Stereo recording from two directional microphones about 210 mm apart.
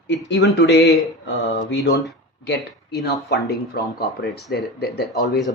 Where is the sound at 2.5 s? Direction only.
50° left (ahead or behind).